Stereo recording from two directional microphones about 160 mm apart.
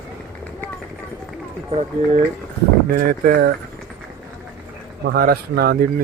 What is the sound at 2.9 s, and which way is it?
Speech, 70° right (ahead or behind).